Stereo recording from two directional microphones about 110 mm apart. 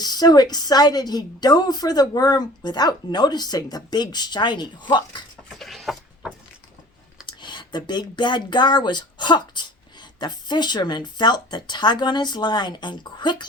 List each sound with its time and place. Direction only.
0.0 s a woman's voice: 35° left (ahead or behind)
5.5 s chicken: centre (ahead or behind)
7.3 s speech: 45° left (ahead or behind)